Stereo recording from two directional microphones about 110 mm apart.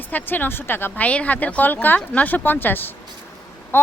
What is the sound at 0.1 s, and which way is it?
Speech, 15° left (ahead or behind).